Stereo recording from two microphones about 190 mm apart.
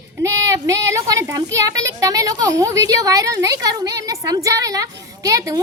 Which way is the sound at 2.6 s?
20° right (ahead or behind).